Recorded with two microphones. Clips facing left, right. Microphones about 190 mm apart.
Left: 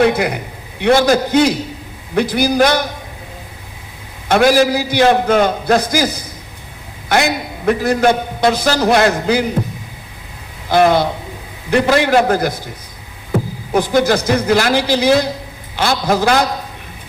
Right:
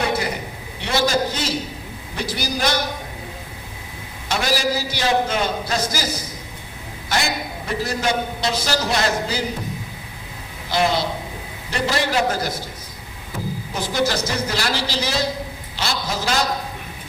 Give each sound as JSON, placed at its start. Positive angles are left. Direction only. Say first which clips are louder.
{"t": 0.1, "sound": "a man's voice", "louder": "left 5 dB", "side_deg": 60}
{"t": 4.3, "sound": "a man's voice", "louder": "left 10 dB", "side_deg": 55}
{"t": 10.7, "sound": "a man's voice", "louder": "left 8 dB", "side_deg": 55}
{"t": 13.9, "sound": "a man's voice", "louder": "left 6 dB", "side_deg": 55}